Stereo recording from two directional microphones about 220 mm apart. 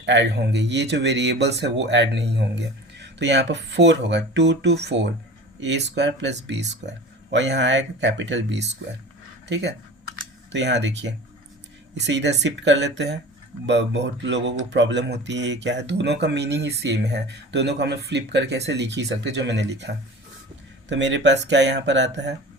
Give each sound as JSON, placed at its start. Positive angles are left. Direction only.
{"t": 0.0, "sound": "speech", "side_deg": -55}